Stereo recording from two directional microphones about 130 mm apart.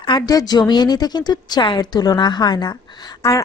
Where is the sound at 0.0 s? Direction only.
30° left (ahead or behind).